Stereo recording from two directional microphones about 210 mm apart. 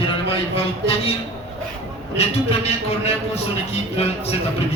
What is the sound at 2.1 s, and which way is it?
A man's voice, 30° left (ahead or behind).